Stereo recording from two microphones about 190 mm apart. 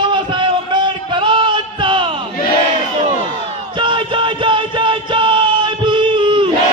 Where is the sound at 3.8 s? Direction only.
25° right (ahead or behind).